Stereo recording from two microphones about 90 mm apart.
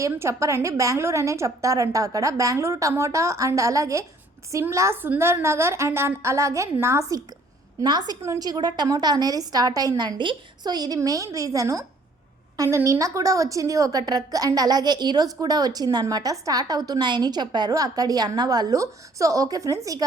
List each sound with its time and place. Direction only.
0.0 s a woman's voice: 35° right (ahead or behind)
7.9 s a woman's voice: 50° right (ahead or behind)
8.2 s a woman's voice: 40° right (ahead or behind)
10.2 s a woman's voice: 55° right (ahead or behind); by 20.0 s 40° right (ahead or behind)